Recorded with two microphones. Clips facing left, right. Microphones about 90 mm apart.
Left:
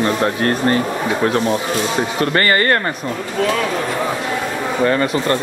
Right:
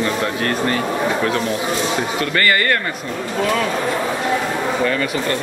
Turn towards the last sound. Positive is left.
turn(degrees=30)  # may be behind; listen again after turning